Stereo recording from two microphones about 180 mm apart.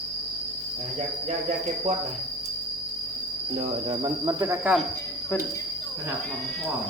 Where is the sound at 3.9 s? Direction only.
25° right (ahead or behind).